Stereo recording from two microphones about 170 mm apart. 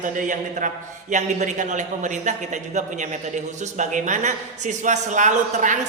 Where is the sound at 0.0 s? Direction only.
50° right (ahead or behind).